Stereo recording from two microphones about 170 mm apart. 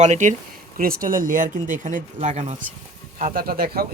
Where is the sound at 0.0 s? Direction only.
45° right (ahead or behind).